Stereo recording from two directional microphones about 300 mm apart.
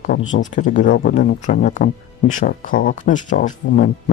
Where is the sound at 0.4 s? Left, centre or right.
Left.